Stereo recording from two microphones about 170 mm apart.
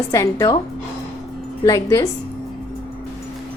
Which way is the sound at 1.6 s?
20° left (ahead or behind).